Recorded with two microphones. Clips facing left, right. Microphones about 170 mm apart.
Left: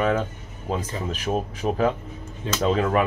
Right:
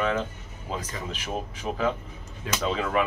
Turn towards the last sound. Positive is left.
turn(degrees=40)  # may be behind; listen again after turning